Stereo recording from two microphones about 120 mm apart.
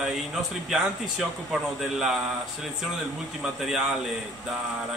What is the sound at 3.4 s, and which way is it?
Speech, 5° right (ahead or behind).